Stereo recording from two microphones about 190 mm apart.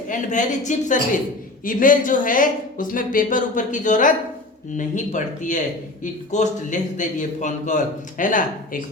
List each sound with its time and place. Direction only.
0.1 s a man's voice: 40° left (ahead or behind)